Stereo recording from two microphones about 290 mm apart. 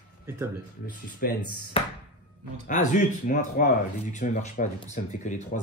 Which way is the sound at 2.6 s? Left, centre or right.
Left.